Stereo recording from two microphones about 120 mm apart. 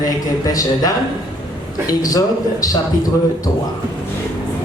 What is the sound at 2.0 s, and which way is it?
Speech, 30° left (ahead or behind).